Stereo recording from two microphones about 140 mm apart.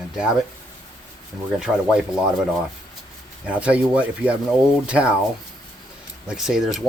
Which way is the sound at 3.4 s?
10° right (ahead or behind).